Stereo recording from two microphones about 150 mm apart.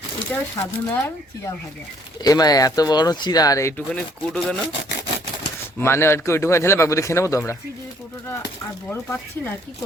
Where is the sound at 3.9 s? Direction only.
5° left (ahead or behind).